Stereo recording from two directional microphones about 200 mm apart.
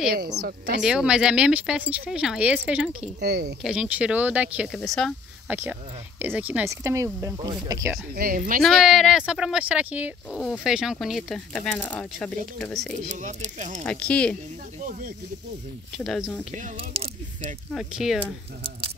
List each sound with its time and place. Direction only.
0.1 s speech: 50° right (ahead or behind)
0.8 s speech: 5° right (ahead or behind)
3.2 s speech: 55° right (ahead or behind)
3.6 s speech: 5° right (ahead or behind)
5.5 s speech: 10° right (ahead or behind)
8.2 s speech: 45° right (ahead or behind)
8.6 s speech: centre (ahead or behind)
13.0 s speech: 35° right (ahead or behind)
13.8 s speech: 5° left (ahead or behind)
14.8 s snake: 40° right (ahead or behind)
16.0 s speech: centre (ahead or behind)
16.5 s speech: 30° right (ahead or behind)
17.7 s speech: centre (ahead or behind)